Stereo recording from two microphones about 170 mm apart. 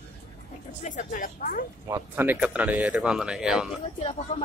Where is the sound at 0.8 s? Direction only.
50° left (ahead or behind).